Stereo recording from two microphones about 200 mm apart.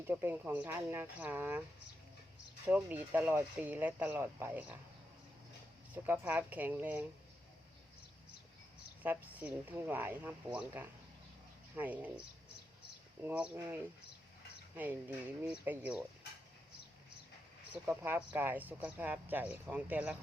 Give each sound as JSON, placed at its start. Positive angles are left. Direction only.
{"t": 0.1, "sound": "speech", "side_deg": -10}
{"t": 2.6, "sound": "speech", "side_deg": -10}
{"t": 5.9, "sound": "speech", "side_deg": -10}
{"t": 9.0, "sound": "speech", "side_deg": -10}
{"t": 13.2, "sound": "speech", "side_deg": -5}
{"t": 17.8, "sound": "speech", "side_deg": -10}